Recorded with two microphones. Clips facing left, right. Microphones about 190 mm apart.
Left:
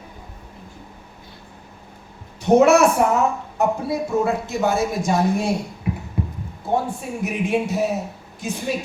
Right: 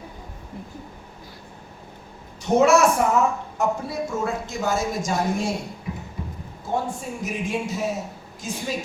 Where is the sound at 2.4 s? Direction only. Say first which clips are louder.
Left 4 dB; 60° left (ahead or behind).